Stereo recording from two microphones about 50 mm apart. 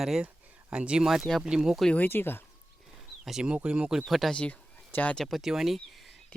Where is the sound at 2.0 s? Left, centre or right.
Left.